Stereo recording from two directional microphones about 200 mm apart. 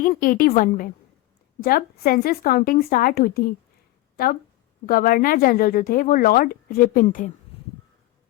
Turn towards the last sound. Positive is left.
turn(degrees=45)  # may be behind; listen again after turning